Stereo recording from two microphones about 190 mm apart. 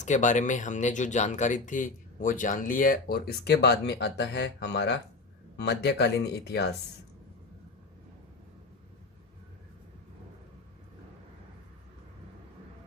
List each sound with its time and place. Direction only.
0.0 s speech: 40° left (ahead or behind); by 6.7 s 60° left (ahead or behind)